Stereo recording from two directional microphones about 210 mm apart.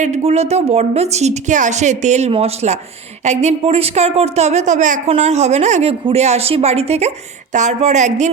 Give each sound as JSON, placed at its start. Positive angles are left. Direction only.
{"t": 0.0, "sound": "speech", "side_deg": -30}